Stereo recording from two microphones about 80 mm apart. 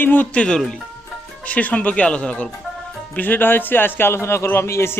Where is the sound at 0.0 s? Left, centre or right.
Left.